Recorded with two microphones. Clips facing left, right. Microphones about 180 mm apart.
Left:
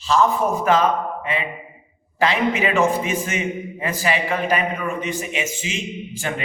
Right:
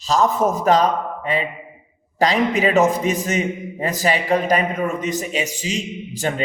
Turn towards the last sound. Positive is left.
turn(degrees=-35)  # may be behind; listen again after turning